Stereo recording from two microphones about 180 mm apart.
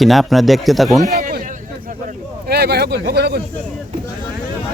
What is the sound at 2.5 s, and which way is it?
Speech, 65° right (ahead or behind).